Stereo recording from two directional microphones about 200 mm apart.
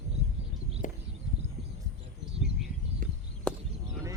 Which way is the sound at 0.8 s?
40° left (ahead or behind).